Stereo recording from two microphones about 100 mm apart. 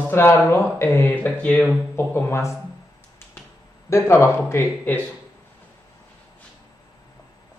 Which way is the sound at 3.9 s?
30° left (ahead or behind).